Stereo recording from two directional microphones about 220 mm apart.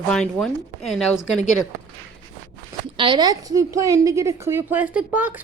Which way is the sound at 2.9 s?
20° right (ahead or behind).